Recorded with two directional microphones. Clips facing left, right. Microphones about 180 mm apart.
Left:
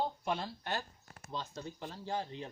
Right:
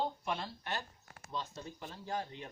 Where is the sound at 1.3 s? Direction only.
30° left (ahead or behind).